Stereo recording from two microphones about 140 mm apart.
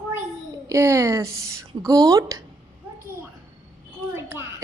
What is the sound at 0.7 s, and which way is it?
A woman's voice, 20° right (ahead or behind).